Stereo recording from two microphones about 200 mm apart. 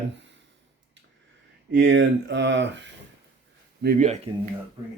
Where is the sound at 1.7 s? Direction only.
65° right (ahead or behind).